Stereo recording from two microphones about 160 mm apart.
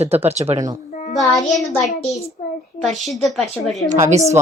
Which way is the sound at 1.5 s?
20° left (ahead or behind).